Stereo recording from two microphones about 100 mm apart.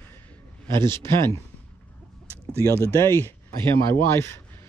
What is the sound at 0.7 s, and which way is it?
Speech, 25° left (ahead or behind).